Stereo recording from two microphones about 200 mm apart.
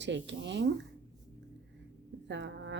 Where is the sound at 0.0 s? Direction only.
65° right (ahead or behind).